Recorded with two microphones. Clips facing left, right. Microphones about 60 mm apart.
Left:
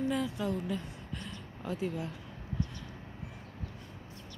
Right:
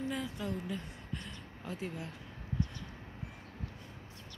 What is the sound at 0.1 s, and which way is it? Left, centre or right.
Speech, left.